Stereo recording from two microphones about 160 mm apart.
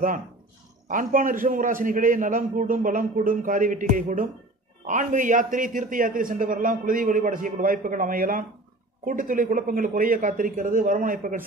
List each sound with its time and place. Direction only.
0.8 s a man's voice: 55° right (ahead or behind)